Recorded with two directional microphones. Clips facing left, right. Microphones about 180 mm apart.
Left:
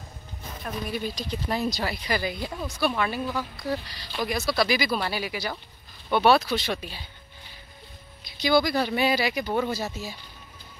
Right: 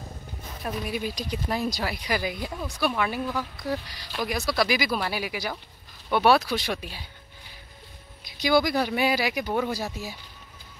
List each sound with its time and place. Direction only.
0.8 s speech: 10° right (ahead or behind)
8.3 s speech: 15° right (ahead or behind)